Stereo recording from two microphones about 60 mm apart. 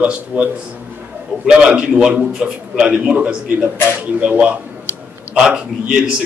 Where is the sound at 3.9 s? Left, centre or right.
Right.